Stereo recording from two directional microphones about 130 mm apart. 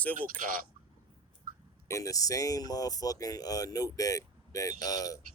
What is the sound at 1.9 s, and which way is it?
Speech, 25° left (ahead or behind).